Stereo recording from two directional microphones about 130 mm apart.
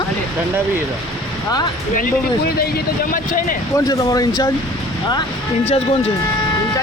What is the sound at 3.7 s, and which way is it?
Speech, 30° left (ahead or behind).